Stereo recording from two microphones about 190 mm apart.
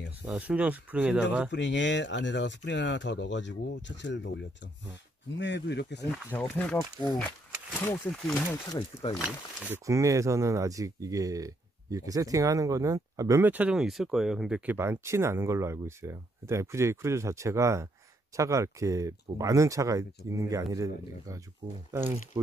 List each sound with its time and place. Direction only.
0.2 s speech: 5° right (ahead or behind)
1.5 s speech: 70° left (ahead or behind)
5.4 s speech: 65° left (ahead or behind)
6.3 s speech: 5° left (ahead or behind)
8.7 s speech: 25° left (ahead or behind)
9.2 s speech: 10° right (ahead or behind)